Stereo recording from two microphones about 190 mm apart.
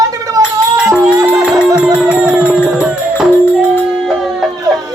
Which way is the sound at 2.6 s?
5° right (ahead or behind).